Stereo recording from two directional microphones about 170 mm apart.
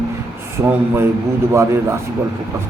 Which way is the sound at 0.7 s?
15° right (ahead or behind).